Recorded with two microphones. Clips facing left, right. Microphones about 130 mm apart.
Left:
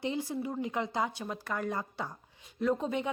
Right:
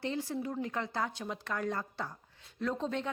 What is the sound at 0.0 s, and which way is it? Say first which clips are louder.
A woman's voice: left 2 dB; 15° left (ahead or behind).